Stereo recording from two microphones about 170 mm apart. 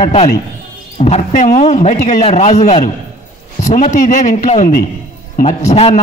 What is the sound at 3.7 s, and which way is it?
A man's voice, 45° left (ahead or behind).